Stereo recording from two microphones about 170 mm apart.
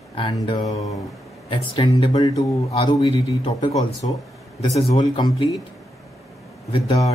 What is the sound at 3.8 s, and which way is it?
Speech, 20° left (ahead or behind).